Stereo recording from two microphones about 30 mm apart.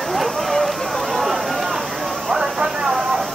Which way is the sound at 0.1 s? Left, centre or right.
Centre.